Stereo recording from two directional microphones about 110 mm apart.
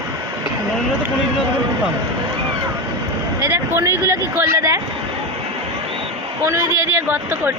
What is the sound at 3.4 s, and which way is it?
Speech, 25° right (ahead or behind).